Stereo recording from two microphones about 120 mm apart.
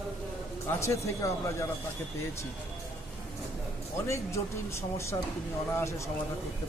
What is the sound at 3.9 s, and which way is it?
Speech, 25° left (ahead or behind).